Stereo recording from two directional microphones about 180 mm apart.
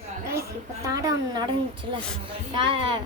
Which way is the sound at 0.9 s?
20° right (ahead or behind).